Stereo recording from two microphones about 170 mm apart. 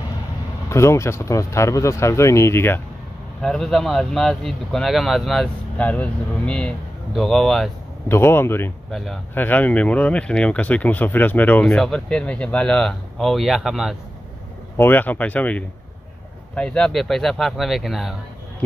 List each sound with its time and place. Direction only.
0.7 s speech: 15° left (ahead or behind)
3.3 s speech: 5° left (ahead or behind)
8.1 s speech: 15° left (ahead or behind)
8.9 s speech: centre (ahead or behind)
14.8 s speech: 10° left (ahead or behind)